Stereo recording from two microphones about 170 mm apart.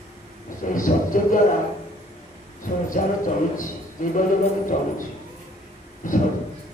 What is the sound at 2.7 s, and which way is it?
Music, 45° left (ahead or behind).